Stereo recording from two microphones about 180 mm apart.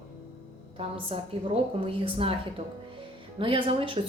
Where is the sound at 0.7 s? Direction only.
30° right (ahead or behind).